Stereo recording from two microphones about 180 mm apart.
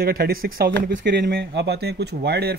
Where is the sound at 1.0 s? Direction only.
70° right (ahead or behind).